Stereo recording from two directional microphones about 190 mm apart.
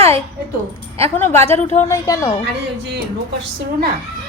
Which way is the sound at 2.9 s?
60° right (ahead or behind).